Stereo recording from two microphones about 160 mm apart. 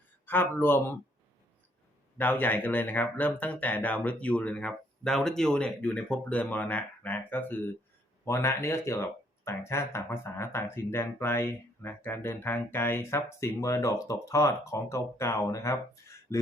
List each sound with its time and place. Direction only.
0.3 s speech: 15° left (ahead or behind)
2.1 s speech: 10° left (ahead or behind)